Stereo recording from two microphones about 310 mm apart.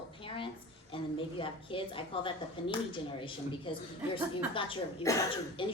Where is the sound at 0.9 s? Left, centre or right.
Centre.